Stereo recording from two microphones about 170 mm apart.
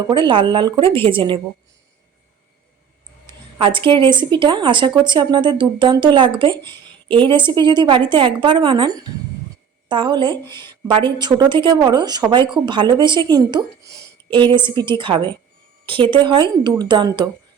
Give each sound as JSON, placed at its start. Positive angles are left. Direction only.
{"t": 0.0, "sound": "speech", "side_deg": -30}
{"t": 3.2, "sound": "speech", "side_deg": -30}